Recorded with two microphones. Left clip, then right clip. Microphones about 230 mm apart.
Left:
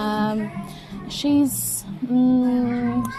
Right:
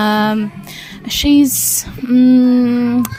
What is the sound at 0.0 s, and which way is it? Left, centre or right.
Music, right.